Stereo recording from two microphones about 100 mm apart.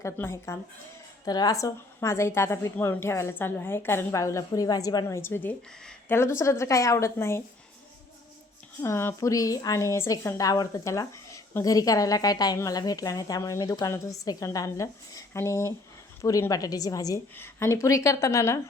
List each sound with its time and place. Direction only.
0.0 s a woman's voice: 25° left (ahead or behind)
1.2 s a woman's voice: 40° left (ahead or behind)
5.0 s a woman's voice: 25° left (ahead or behind)
8.8 s a woman's voice: 25° left (ahead or behind)
17.3 s speech: 25° left (ahead or behind)